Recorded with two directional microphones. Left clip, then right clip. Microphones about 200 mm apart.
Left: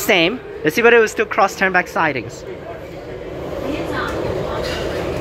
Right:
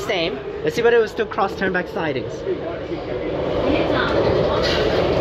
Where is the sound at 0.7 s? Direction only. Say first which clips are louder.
Left 4 dB; 20° left (ahead or behind).